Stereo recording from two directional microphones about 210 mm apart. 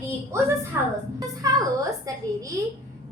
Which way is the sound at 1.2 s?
15° right (ahead or behind).